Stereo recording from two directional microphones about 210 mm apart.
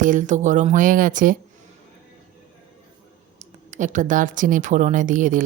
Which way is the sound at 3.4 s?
35° right (ahead or behind).